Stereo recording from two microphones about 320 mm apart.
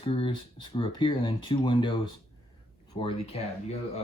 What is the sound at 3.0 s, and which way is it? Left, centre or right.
Speech, centre.